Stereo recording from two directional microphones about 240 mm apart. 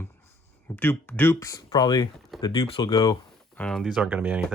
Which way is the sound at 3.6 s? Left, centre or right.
Centre.